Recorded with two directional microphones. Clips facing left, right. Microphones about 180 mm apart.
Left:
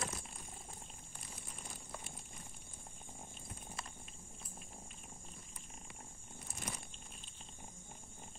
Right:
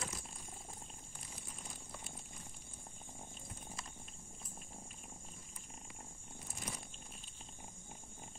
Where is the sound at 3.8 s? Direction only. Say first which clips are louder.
Left 5 dB; 60° left (ahead or behind).